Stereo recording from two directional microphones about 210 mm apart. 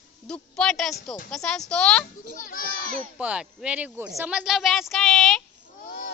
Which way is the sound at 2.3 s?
40° left (ahead or behind).